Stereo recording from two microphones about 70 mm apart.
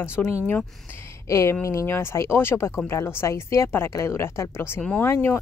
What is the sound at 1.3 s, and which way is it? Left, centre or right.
A woman's voice, left.